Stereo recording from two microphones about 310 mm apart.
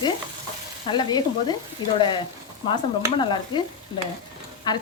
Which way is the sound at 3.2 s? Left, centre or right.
Centre.